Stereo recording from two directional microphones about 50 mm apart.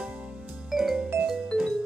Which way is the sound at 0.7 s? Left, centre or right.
Centre.